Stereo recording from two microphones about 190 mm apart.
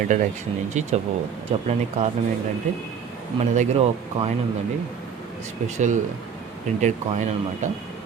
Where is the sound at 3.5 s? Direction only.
35° right (ahead or behind).